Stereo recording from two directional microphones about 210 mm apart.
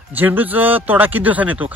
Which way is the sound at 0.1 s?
10° right (ahead or behind).